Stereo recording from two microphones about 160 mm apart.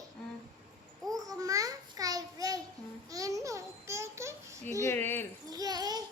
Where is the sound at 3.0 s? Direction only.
20° right (ahead or behind).